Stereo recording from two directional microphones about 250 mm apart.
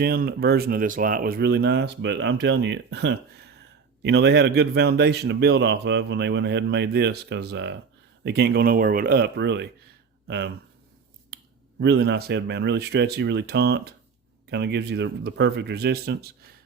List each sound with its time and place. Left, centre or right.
0.0 s a man's voice: right
11.3 s finger snapping: right
11.8 s speech: right